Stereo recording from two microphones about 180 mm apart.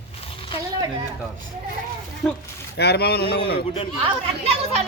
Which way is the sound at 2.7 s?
65° left (ahead or behind).